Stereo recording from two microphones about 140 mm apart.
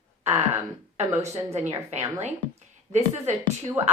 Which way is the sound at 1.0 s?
50° right (ahead or behind).